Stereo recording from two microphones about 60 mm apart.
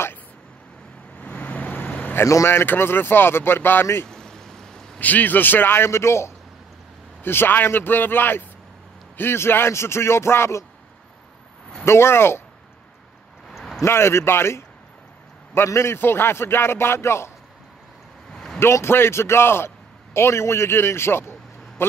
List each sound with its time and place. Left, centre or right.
1.2 s vehicle: left
2.4 s a man's voice: left
4.1 s a sound: centre
5.0 s speech: left
7.2 s a man's voice: left
11.8 s a man's voice: left
13.5 s a sound: centre
13.8 s a man's voice: left
18.3 s vehicle: centre
18.6 s a man's voice: left